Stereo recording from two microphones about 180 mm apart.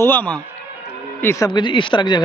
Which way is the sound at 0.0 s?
10° left (ahead or behind).